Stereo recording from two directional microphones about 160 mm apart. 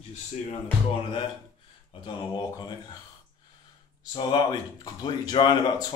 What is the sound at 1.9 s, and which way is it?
Speech, 25° left (ahead or behind).